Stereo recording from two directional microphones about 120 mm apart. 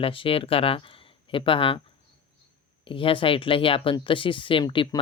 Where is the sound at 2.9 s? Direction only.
45° left (ahead or behind).